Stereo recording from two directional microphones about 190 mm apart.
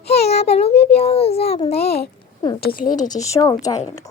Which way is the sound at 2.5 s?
50° left (ahead or behind).